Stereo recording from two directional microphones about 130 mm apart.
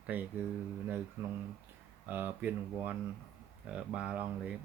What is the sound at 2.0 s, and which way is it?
Speech, 15° right (ahead or behind).